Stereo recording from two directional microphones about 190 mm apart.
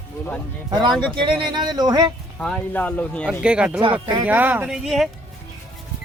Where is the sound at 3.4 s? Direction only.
5° right (ahead or behind).